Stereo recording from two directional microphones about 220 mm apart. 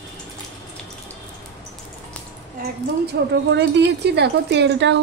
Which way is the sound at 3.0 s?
50° right (ahead or behind).